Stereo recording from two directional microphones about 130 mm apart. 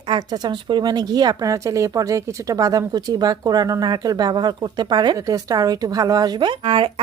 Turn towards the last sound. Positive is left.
turn(degrees=-40)  # may be behind; listen again after turning